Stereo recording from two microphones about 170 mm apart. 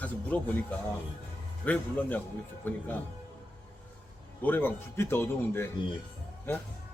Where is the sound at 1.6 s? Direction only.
10° left (ahead or behind).